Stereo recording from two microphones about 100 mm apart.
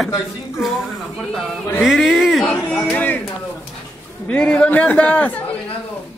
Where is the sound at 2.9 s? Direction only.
15° left (ahead or behind).